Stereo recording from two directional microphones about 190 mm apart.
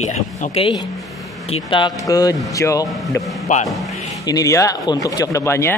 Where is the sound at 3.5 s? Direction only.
40° left (ahead or behind).